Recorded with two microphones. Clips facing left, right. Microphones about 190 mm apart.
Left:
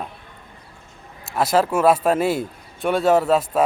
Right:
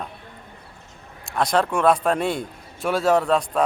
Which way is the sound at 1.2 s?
5° left (ahead or behind).